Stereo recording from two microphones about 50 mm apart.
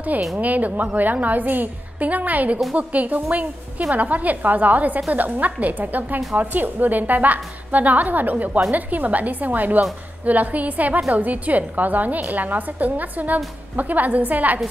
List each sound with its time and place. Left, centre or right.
0.4 s a woman's voice: right